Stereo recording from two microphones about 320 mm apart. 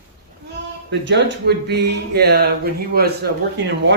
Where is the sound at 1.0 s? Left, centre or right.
Right.